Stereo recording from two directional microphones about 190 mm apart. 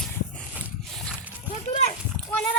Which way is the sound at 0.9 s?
Centre (ahead or behind).